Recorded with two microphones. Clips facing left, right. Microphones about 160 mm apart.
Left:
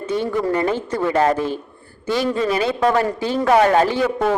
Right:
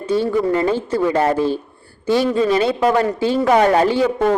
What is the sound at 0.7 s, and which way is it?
Speech, 30° right (ahead or behind).